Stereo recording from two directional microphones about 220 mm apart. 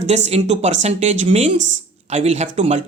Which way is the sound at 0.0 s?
30° right (ahead or behind).